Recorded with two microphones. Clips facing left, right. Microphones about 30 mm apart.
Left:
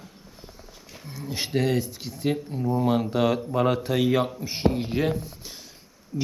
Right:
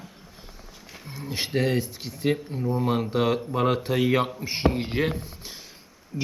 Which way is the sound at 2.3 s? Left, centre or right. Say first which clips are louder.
Even; centre.